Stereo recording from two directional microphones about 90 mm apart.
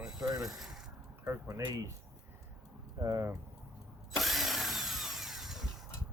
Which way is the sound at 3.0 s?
30° right (ahead or behind).